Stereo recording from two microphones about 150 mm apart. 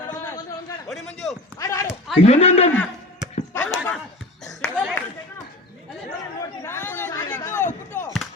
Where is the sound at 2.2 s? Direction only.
45° left (ahead or behind).